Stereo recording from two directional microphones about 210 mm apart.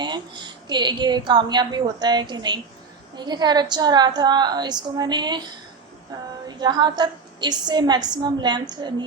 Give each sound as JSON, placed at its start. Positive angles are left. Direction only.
{"t": 0.0, "sound": "a woman's voice", "side_deg": -20}
{"t": 6.5, "sound": "a woman's voice", "side_deg": -20}